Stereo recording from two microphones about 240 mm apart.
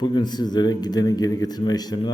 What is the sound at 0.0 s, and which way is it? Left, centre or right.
Speech, centre.